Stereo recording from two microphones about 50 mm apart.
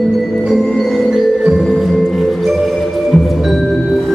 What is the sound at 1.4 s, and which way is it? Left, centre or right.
Music, centre.